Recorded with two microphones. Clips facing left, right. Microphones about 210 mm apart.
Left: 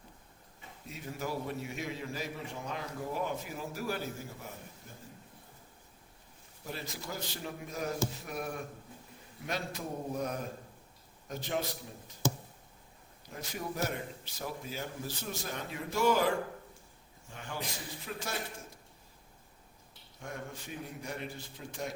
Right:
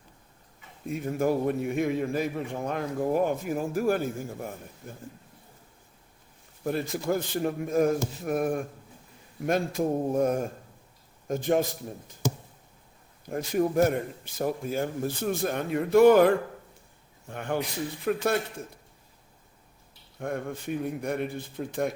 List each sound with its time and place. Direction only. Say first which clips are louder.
0.9 s a man's voice: right 12 dB; 50° right (ahead or behind)
6.7 s a man's voice: right 14 dB; 55° right (ahead or behind)
13.2 s a man's voice: right 14 dB; 50° right (ahead or behind)
20.1 s a man's voice: right 11 dB; 55° right (ahead or behind)